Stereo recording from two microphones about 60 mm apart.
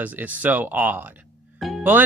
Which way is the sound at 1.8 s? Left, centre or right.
Right.